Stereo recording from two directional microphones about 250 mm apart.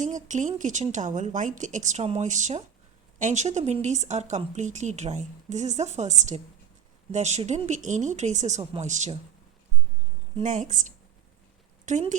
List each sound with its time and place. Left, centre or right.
0.0 s speech: right
10.3 s a woman's voice: right